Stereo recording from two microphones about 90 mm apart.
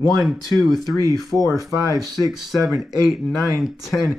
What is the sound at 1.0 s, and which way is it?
Speech, 40° right (ahead or behind).